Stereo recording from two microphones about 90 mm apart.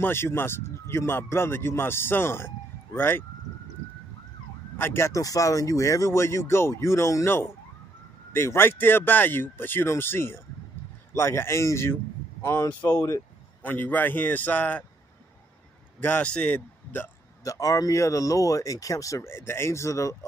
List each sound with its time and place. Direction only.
0.0 s speech: 25° left (ahead or behind)
4.7 s speech: 25° left (ahead or behind)
13.6 s speech: 20° left (ahead or behind)
16.0 s speech: 15° left (ahead or behind)
17.4 s speech: 40° left (ahead or behind)